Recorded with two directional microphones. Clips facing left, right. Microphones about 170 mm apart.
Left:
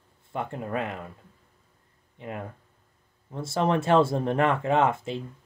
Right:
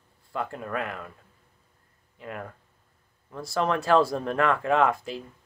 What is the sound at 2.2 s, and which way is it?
Speech, 25° left (ahead or behind).